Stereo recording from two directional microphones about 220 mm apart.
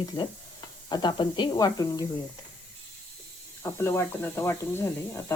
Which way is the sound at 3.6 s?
10° left (ahead or behind).